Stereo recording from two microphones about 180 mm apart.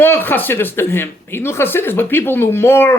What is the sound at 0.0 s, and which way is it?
Speech, 10° left (ahead or behind).